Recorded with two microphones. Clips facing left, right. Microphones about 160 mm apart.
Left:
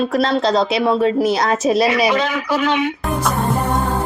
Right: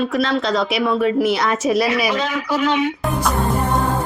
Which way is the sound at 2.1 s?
65° left (ahead or behind).